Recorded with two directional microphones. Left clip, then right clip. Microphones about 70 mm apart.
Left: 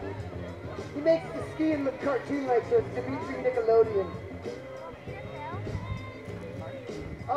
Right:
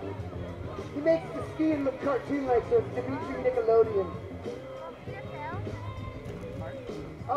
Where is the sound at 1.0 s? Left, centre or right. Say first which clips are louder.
Left 1 dB; left.